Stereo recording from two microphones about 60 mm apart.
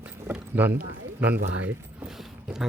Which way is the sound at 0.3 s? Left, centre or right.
Right.